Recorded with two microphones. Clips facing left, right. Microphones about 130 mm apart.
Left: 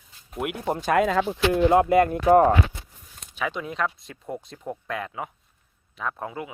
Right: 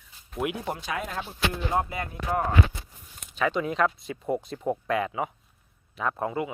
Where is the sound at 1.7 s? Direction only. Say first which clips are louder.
Left 11 dB; 80° left; by 2.5 s 60° left (ahead or behind).